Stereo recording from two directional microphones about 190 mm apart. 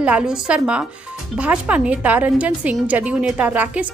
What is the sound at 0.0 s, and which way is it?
A woman's voice, 5° right (ahead or behind).